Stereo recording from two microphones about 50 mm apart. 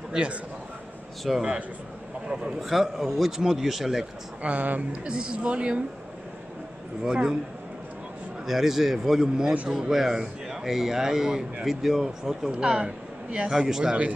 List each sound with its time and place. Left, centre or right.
0.1 s a man's voice: centre
1.3 s a man's voice: centre
2.2 s a man's voice: centre
2.6 s a man's voice: centre
4.4 s a woman's voice: right
5.0 s a woman's voice: centre
7.0 s a man's voice: centre
8.5 s a man's voice: centre
13.5 s a man's voice: centre